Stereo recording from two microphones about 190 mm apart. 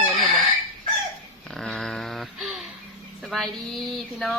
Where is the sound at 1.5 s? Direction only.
5° left (ahead or behind).